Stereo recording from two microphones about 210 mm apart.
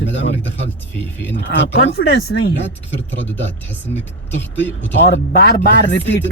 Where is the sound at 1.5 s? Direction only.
60° left (ahead or behind).